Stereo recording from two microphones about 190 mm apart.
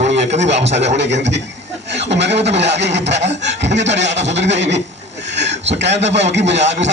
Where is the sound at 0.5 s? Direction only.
65° right (ahead or behind).